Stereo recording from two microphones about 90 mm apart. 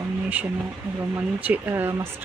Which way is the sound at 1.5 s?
25° right (ahead or behind).